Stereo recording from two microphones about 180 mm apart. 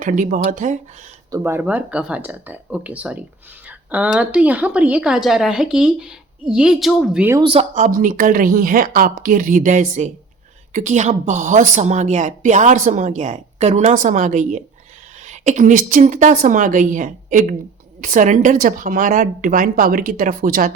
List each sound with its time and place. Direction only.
0.0 s speech: 45° right (ahead or behind)
1.3 s speech: 15° right (ahead or behind)
7.3 s speech: 30° right (ahead or behind)
7.9 s speech: 50° right (ahead or behind)